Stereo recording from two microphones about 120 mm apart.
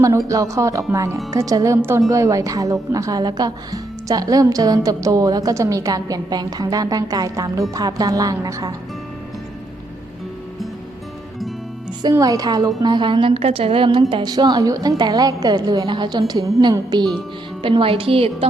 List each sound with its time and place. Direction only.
0.3 s a woman's voice: 25° right (ahead or behind)
12.1 s a woman's voice: 30° right (ahead or behind)
17.6 s a woman's voice: 45° right (ahead or behind)